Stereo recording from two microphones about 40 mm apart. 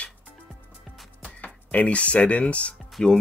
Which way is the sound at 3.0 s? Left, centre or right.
Centre.